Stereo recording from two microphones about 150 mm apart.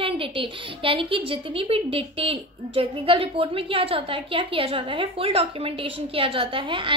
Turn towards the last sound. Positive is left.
turn(degrees=-35)  # may be behind; listen again after turning